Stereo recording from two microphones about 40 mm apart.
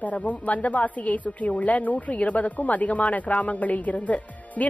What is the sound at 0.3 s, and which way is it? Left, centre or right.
Speech, left.